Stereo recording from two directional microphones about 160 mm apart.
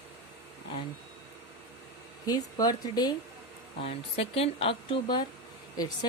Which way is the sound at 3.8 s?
40° left (ahead or behind).